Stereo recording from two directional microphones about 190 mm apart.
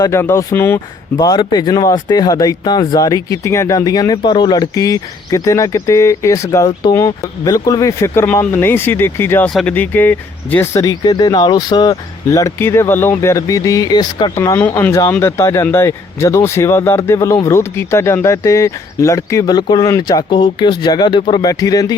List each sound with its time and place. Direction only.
0.0 s speech: 15° left (ahead or behind)